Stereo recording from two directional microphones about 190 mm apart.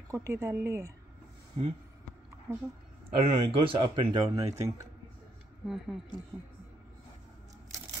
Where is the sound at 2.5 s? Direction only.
10° right (ahead or behind).